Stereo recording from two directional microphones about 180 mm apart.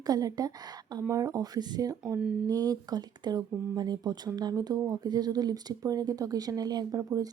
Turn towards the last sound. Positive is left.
turn(degrees=-20)  # may be behind; listen again after turning